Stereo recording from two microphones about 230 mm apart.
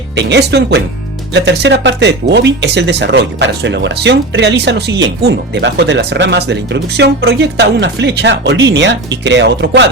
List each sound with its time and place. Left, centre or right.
0.2 s speech: right